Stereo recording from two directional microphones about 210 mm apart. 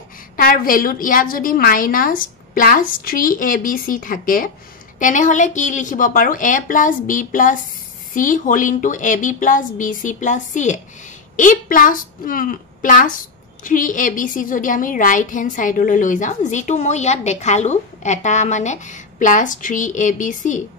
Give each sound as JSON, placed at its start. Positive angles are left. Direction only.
{"t": 0.4, "sound": "a woman's voice", "side_deg": 40}